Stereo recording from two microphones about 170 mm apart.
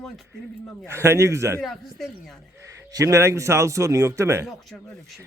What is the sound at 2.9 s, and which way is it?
Speech, 20° right (ahead or behind).